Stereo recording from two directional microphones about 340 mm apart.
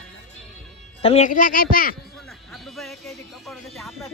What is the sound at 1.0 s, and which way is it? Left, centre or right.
Speech, centre.